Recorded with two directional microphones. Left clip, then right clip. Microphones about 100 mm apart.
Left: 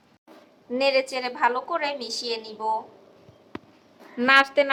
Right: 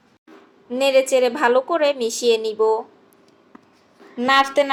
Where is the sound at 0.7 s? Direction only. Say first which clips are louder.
Right 6 dB; 30° right (ahead or behind).